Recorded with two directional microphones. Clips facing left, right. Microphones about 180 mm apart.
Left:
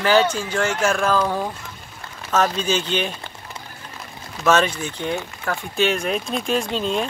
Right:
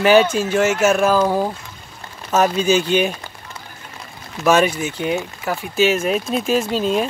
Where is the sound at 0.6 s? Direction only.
5° right (ahead or behind).